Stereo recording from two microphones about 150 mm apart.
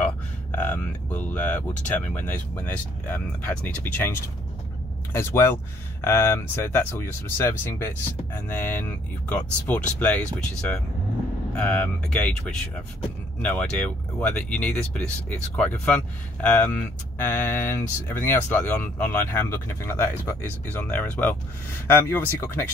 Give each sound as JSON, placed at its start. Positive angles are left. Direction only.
{"t": 0.0, "sound": "speech", "side_deg": 10}